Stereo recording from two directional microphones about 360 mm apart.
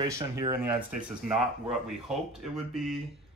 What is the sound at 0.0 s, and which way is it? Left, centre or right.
Speech, centre.